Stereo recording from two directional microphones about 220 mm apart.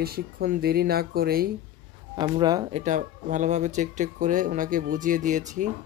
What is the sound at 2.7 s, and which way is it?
Speech, 35° right (ahead or behind).